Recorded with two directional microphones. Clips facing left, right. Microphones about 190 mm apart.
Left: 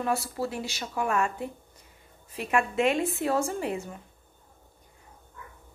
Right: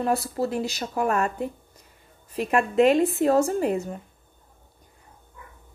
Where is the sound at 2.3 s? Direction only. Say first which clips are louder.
Right 5 dB; 40° right (ahead or behind).